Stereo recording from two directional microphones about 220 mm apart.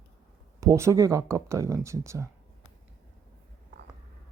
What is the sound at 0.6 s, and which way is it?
Speech, 15° right (ahead or behind).